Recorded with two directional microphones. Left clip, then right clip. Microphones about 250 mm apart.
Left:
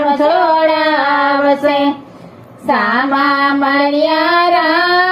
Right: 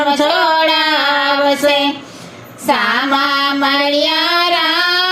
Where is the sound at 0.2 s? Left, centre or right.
Right.